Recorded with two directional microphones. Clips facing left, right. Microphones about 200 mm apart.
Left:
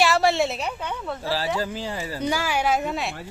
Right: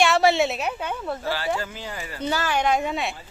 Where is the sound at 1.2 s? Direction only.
30° left (ahead or behind).